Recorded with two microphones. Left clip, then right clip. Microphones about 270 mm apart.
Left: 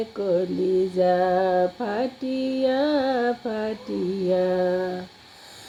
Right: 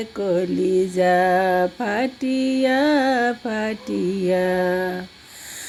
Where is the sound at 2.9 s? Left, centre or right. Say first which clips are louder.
Right 4 dB; right.